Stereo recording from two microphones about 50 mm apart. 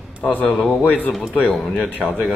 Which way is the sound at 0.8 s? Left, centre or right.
Left.